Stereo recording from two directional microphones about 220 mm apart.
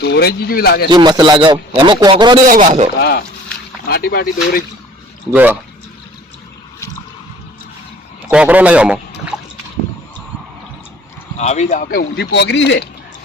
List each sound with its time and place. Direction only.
0.0 s speech: 45° left (ahead or behind)
0.9 s a man's voice: 20° right (ahead or behind)
2.5 s a man's voice: 35° right (ahead or behind)
3.0 s speech: 45° left (ahead or behind)
5.3 s speech: 10° right (ahead or behind)
8.3 s speech: 5° right (ahead or behind)
11.3 s speech: 30° left (ahead or behind); by 12.9 s 55° left (ahead or behind)